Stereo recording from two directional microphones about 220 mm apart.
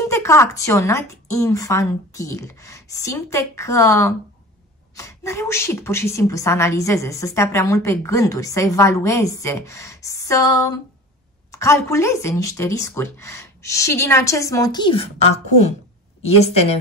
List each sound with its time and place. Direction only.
0.1 s a woman's voice: 10° left (ahead or behind); by 16.7 s 30° left (ahead or behind)